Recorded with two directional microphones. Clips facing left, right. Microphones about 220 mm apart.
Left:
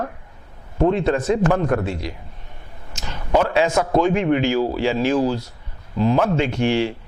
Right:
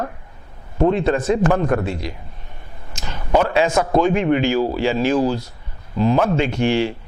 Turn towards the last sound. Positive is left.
turn(degrees=-15)  # may be behind; listen again after turning